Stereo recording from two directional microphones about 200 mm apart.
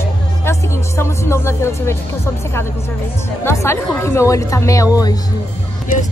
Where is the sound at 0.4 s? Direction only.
15° left (ahead or behind).